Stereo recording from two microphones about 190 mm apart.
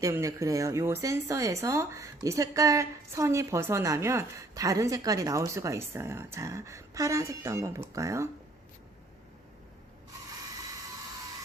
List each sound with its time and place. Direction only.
0.0 s speech: 15° right (ahead or behind)